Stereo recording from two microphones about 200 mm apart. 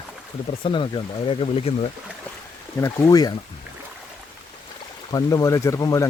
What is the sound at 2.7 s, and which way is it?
Speech, 15° left (ahead or behind).